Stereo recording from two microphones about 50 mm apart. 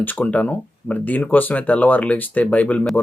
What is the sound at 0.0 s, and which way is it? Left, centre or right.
Speech, left.